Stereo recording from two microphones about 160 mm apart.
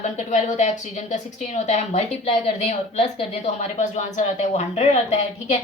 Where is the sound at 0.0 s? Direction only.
50° left (ahead or behind).